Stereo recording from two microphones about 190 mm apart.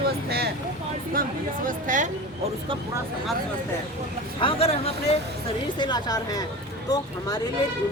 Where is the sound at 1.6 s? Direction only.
45° right (ahead or behind).